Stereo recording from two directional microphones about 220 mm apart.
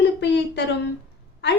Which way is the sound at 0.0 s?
50° left (ahead or behind).